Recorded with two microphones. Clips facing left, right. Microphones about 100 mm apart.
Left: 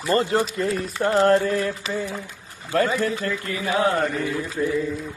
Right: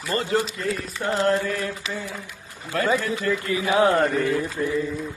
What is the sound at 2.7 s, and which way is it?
Mantra, 40° left (ahead or behind).